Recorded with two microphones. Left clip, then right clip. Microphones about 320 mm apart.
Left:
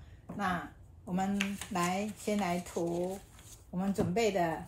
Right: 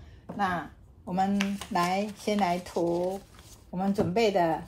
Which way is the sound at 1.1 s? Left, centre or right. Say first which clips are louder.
Right 6 dB; right.